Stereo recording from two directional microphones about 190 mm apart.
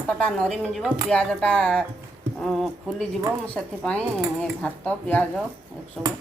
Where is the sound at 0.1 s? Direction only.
5° left (ahead or behind).